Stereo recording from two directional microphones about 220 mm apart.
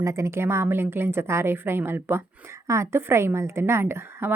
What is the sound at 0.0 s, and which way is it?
A woman's voice, 15° right (ahead or behind).